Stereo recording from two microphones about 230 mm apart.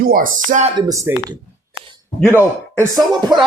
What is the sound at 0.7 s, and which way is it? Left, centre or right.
Speech, centre.